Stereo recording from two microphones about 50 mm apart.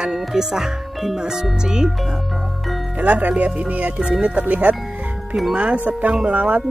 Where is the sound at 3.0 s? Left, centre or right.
Right.